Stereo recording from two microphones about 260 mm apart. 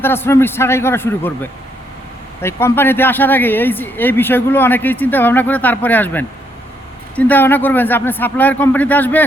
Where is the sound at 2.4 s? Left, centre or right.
Centre.